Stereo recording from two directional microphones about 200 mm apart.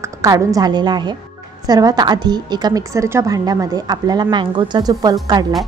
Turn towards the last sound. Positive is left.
turn(degrees=-20)  # may be behind; listen again after turning